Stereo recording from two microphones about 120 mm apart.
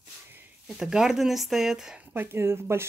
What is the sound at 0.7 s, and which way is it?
Speech, 5° right (ahead or behind).